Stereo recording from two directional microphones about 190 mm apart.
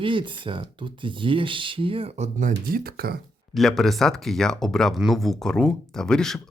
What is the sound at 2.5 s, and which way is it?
Speech, 55° right (ahead or behind).